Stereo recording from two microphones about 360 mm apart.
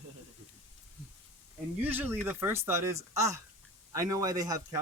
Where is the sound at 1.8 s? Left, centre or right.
Centre.